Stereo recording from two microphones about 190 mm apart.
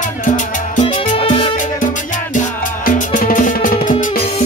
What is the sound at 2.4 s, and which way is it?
Music, 45° left (ahead or behind).